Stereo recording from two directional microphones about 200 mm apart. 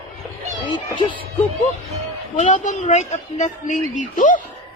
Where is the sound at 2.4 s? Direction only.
35° left (ahead or behind).